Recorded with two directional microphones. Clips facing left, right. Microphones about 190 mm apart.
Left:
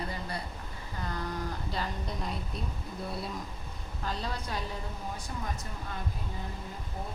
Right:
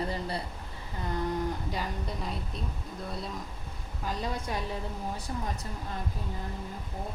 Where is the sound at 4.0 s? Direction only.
15° right (ahead or behind).